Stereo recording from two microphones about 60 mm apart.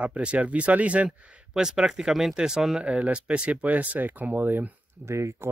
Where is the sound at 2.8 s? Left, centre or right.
Right.